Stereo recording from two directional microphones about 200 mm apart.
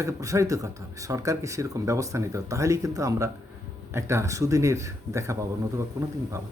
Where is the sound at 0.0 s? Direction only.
15° right (ahead or behind).